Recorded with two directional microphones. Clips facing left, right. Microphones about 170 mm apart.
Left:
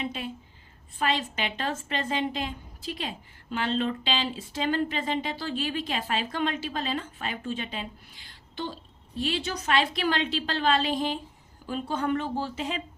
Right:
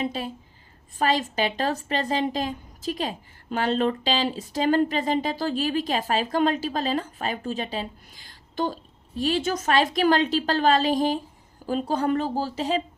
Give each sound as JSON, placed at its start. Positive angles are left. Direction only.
{"t": 0.0, "sound": "a woman's voice", "side_deg": -35}